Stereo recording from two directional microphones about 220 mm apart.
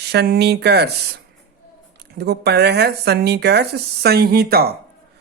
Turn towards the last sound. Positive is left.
turn(degrees=-45)  # may be behind; listen again after turning